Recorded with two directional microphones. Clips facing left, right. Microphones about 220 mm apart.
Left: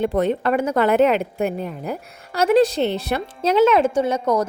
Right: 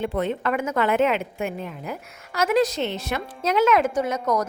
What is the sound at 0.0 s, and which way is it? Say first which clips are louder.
A woman's voice: left 5 dB; 40° left (ahead or behind).